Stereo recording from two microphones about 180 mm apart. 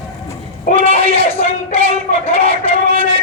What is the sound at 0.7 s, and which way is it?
A man's voice, 35° left (ahead or behind).